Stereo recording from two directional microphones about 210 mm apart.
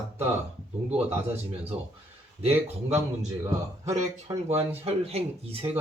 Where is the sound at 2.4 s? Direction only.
30° right (ahead or behind).